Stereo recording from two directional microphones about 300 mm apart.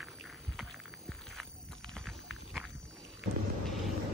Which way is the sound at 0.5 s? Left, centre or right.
Centre.